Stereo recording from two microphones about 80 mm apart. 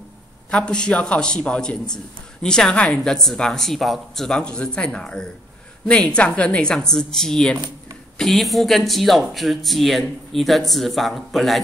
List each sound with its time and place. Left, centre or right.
0.5 s a woman's voice: centre